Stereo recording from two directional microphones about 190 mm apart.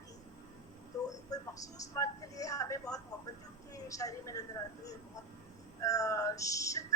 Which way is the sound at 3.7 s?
15° left (ahead or behind).